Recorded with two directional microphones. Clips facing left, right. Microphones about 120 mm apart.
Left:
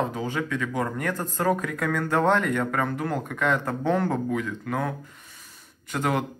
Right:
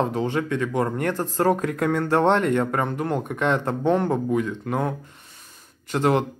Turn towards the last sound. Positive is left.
turn(degrees=-30)  # may be behind; listen again after turning